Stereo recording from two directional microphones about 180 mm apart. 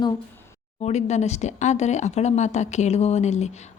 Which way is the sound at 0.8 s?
40° left (ahead or behind).